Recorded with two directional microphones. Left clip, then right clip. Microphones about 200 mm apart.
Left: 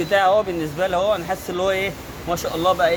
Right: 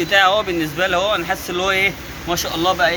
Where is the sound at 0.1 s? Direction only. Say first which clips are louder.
Right 2 dB; 30° left (ahead or behind).